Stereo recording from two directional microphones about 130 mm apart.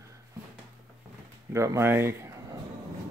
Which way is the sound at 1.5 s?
25° right (ahead or behind).